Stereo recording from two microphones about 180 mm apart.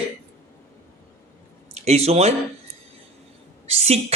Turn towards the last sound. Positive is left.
turn(degrees=-35)  # may be behind; listen again after turning